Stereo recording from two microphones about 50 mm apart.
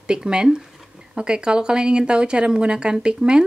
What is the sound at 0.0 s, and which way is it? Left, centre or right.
A woman's voice, centre.